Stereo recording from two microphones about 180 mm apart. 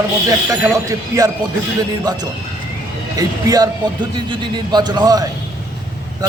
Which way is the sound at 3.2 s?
20° right (ahead or behind).